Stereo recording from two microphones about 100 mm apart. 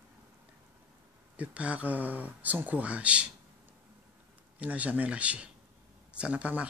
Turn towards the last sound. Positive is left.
turn(degrees=-15)  # may be behind; listen again after turning